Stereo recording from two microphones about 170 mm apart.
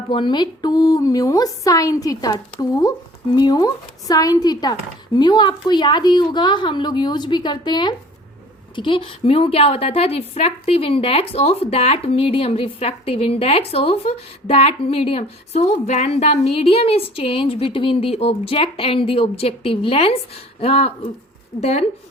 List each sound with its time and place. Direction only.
0.1 s a woman's voice: 25° left (ahead or behind)